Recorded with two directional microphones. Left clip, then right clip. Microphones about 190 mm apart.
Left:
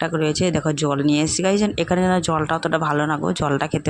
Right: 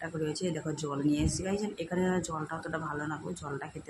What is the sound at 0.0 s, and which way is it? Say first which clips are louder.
Speech: left 14 dB; 45° left (ahead or behind).